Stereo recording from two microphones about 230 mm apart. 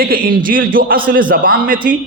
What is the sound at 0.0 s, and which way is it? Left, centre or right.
A man's voice, right.